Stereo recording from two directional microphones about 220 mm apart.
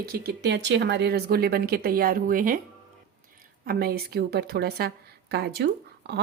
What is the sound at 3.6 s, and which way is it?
A woman's voice, 45° right (ahead or behind).